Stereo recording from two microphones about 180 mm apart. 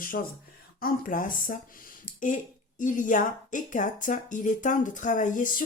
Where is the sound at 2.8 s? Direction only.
45° left (ahead or behind).